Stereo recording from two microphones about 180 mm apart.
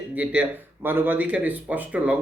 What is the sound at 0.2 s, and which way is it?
Speech, 5° right (ahead or behind).